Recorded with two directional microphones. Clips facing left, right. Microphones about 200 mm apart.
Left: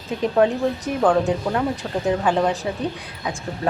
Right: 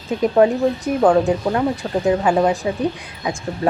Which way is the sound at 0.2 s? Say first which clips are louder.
Right 4 dB; 10° right (ahead or behind).